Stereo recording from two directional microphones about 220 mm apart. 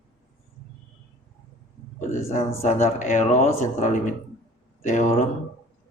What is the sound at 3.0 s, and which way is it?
A man's voice, 35° left (ahead or behind).